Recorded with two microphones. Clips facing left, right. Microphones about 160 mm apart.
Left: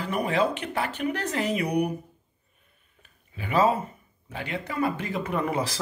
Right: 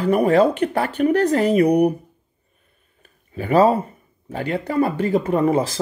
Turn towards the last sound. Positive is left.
turn(degrees=-30)  # may be behind; listen again after turning